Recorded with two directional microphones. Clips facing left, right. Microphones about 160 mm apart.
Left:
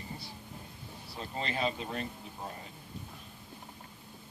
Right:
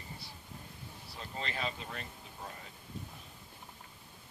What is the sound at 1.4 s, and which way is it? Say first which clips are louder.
Speech: left 5 dB; 25° left (ahead or behind).